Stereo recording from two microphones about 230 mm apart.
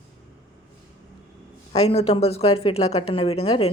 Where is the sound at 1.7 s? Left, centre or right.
Left.